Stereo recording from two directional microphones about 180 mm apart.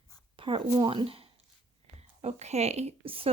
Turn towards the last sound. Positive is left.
turn(degrees=-30)  # may be behind; listen again after turning